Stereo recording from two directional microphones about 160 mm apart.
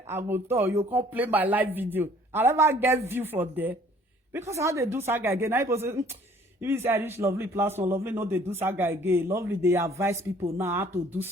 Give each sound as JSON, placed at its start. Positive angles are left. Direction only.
{"t": 0.1, "sound": "a woman's voice", "side_deg": -15}